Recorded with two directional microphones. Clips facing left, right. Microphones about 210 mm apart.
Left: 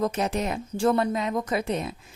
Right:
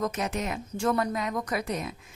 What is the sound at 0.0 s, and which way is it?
A woman's voice, 30° left (ahead or behind).